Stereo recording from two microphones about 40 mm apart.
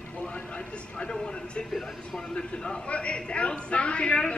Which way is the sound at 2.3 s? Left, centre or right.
Left.